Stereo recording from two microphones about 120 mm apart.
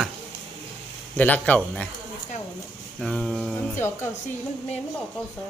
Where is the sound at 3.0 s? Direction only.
5° left (ahead or behind).